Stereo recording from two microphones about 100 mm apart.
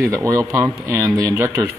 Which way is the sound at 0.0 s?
30° right (ahead or behind).